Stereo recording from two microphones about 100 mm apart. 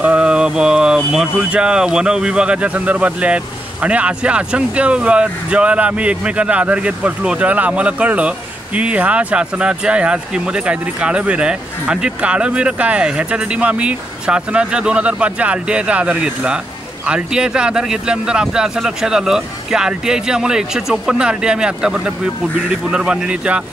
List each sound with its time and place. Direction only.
0.0 s speech: 10° right (ahead or behind)